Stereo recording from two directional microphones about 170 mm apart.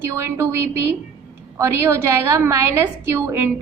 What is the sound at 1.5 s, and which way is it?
A woman's voice, 15° right (ahead or behind).